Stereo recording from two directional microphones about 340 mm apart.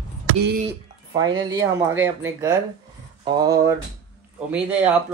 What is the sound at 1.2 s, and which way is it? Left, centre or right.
Speech, centre.